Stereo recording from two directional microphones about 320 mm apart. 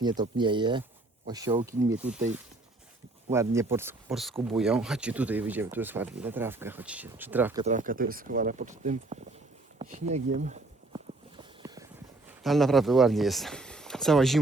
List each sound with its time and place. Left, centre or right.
0.0 s speech: centre
7.6 s speech: right
11.3 s walk: centre
12.4 s speech: centre